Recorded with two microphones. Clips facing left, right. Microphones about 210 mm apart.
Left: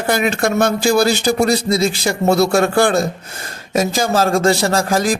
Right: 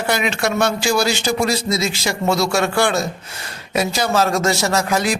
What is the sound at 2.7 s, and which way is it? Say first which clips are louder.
Speech: left 4 dB; 55° left (ahead or behind).